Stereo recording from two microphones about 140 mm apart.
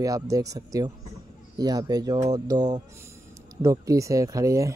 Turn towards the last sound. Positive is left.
turn(degrees=-25)  # may be behind; listen again after turning